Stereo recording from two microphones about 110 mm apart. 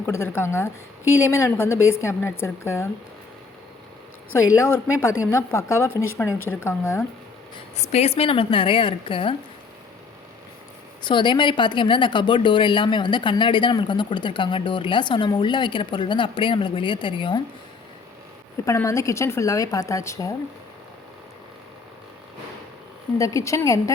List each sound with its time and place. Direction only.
0.1 s a woman's voice: 25° left (ahead or behind)
4.5 s a woman's voice: 25° left (ahead or behind)
7.8 s a woman's voice: 75° left (ahead or behind); by 9.3 s 50° left (ahead or behind)
11.0 s a woman's voice: 45° left (ahead or behind)
18.6 s a woman's voice: 30° left (ahead or behind)
23.1 s a woman's voice: 30° left (ahead or behind)